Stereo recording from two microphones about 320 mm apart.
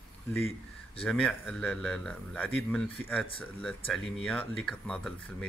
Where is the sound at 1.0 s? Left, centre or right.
Centre.